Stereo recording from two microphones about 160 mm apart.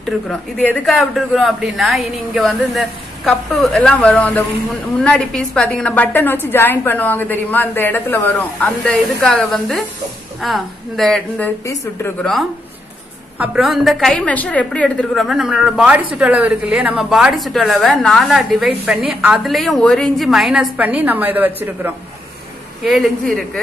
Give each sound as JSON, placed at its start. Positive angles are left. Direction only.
{"t": 0.0, "sound": "a woman's voice", "side_deg": 5}
{"t": 11.6, "sound": "speech", "side_deg": 20}
{"t": 12.2, "sound": "a woman's voice", "side_deg": 0}
{"t": 22.8, "sound": "a woman's voice", "side_deg": 0}